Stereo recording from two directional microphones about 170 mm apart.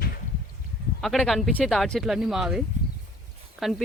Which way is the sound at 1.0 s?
Centre (ahead or behind).